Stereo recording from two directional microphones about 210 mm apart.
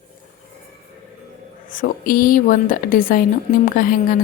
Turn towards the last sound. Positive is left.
turn(degrees=40)  # may be behind; listen again after turning